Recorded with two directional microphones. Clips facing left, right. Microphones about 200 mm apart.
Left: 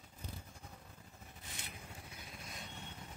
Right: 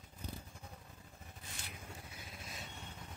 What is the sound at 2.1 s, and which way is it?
Vehicle, centre (ahead or behind).